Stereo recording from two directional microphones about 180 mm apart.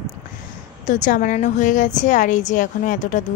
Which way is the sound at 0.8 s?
45° left (ahead or behind).